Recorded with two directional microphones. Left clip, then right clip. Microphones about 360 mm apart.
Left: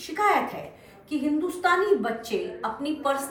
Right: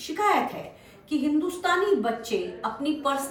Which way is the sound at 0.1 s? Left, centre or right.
Centre.